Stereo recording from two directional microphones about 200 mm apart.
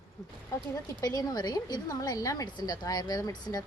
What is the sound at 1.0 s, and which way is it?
A woman's voice, 20° left (ahead or behind).